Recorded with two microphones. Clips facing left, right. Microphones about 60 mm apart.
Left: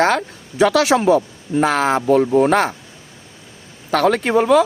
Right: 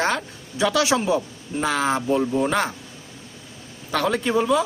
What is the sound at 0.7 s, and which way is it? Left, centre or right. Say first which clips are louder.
Speech: left 5 dB; left.